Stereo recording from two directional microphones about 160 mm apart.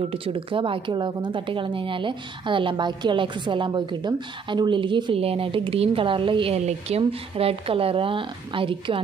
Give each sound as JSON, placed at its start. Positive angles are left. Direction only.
{"t": 0.0, "sound": "a woman's voice", "side_deg": -35}